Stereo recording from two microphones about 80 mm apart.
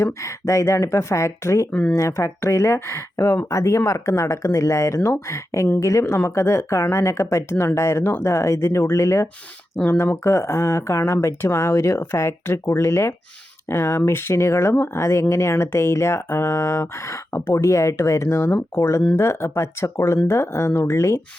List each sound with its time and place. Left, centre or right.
0.0 s speech: left
1.7 s speech: centre
2.0 s speech: left